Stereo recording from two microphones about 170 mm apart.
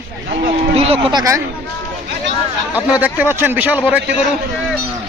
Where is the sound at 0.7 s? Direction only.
35° right (ahead or behind).